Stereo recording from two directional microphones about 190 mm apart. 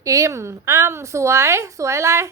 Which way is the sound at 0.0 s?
15° right (ahead or behind).